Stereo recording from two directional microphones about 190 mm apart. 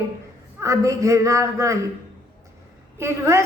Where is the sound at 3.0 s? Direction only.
15° right (ahead or behind).